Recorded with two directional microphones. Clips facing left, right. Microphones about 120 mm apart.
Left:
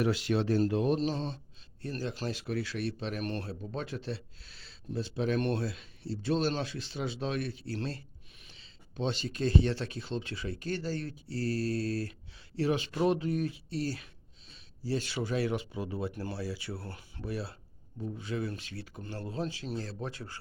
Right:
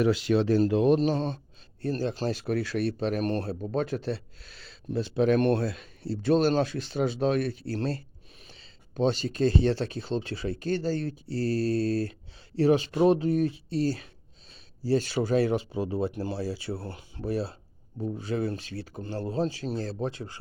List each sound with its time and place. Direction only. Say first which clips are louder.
0.4 s speech: right 6 dB; 90° right; by 1.4 s 55° right (ahead or behind)
1.8 s speech: right 7 dB; 35° right (ahead or behind)
3.6 s speech: right 9 dB; 50° right (ahead or behind)
4.4 s speech: right 5 dB; 70° right (ahead or behind); by 14.1 s 30° right (ahead or behind)
14.5 s speech: right 8 dB; 40° right (ahead or behind); by 20.3 s 25° right (ahead or behind)